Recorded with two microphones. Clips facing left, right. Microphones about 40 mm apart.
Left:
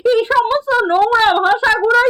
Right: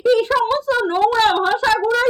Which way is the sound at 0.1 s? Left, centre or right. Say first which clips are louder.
Left 2 dB; left.